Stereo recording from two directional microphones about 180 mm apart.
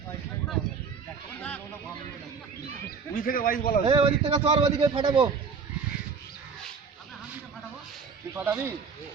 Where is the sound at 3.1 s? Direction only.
50° left (ahead or behind).